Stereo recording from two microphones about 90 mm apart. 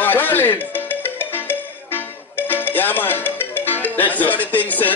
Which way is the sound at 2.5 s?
20° left (ahead or behind).